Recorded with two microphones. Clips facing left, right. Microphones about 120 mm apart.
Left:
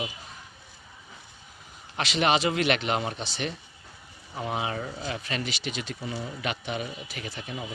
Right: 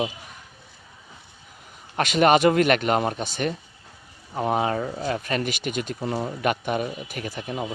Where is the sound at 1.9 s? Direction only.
50° right (ahead or behind).